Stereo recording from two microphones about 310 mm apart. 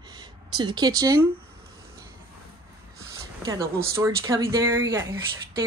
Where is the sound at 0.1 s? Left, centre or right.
Centre.